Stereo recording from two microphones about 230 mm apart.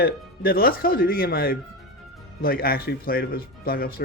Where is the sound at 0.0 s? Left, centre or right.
Left.